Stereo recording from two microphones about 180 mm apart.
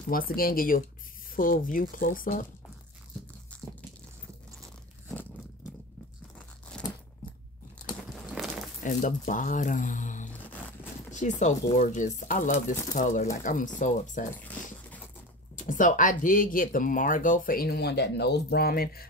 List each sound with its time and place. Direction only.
0.1 s speech: 55° left (ahead or behind)
8.3 s a sound: centre (ahead or behind)
8.8 s speech: 45° left (ahead or behind)
15.5 s speech: 45° left (ahead or behind)